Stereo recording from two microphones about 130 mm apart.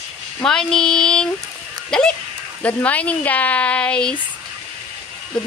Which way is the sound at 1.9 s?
5° left (ahead or behind).